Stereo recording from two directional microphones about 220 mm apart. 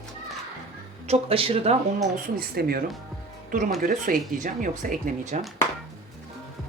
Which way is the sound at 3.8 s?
40° right (ahead or behind).